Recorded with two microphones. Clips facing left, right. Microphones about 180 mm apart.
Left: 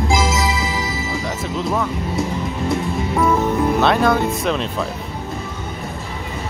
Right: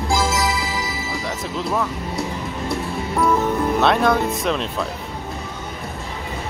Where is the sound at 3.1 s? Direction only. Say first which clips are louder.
Left 1 dB; 5° left (ahead or behind).